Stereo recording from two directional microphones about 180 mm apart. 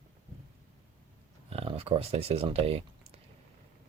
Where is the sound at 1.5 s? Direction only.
30° right (ahead or behind).